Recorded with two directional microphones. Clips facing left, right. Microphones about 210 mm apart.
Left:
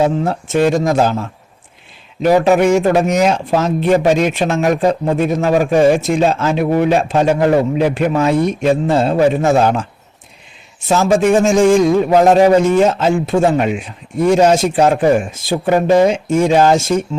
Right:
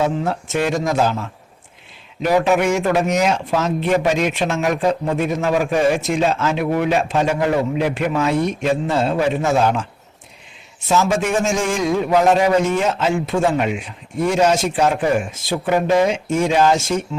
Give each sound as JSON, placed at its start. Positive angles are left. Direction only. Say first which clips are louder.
{"t": 0.0, "sound": "speech", "louder": "left 4 dB", "side_deg": 35}
{"t": 2.2, "sound": "speech", "louder": "left 5 dB", "side_deg": 35}
{"t": 10.8, "sound": "speech", "louder": "left 6 dB", "side_deg": 35}